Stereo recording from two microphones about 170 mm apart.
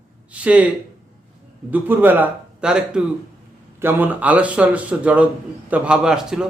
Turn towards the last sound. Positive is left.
turn(degrees=-5)  # may be behind; listen again after turning